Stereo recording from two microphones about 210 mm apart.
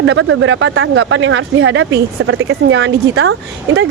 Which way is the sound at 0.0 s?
65° right (ahead or behind).